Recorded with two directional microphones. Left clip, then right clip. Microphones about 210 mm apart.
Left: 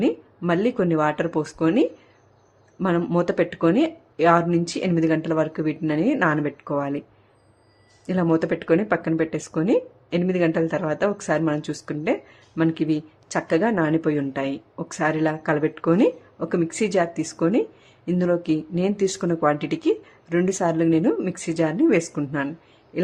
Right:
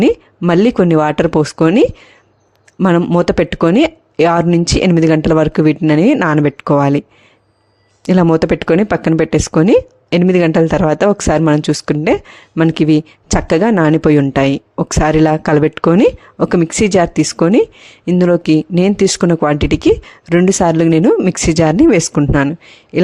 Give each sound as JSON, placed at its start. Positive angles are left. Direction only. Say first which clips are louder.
{"t": 0.0, "sound": "speech", "louder": "right 11 dB", "side_deg": -45}
{"t": 8.0, "sound": "speech", "louder": "right 10 dB", "side_deg": -45}